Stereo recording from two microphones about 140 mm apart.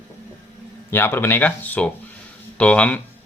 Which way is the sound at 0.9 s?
15° left (ahead or behind).